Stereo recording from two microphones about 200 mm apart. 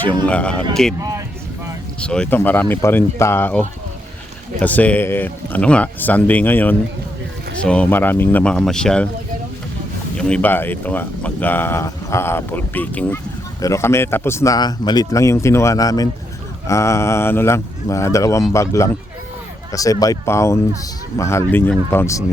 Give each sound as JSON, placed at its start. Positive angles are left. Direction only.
{"t": 0.0, "sound": "speech", "side_deg": 5}
{"t": 2.0, "sound": "speech", "side_deg": 5}
{"t": 10.2, "sound": "speech", "side_deg": 5}